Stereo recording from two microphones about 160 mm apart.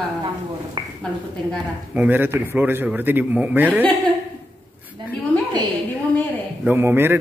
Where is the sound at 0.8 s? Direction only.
25° right (ahead or behind).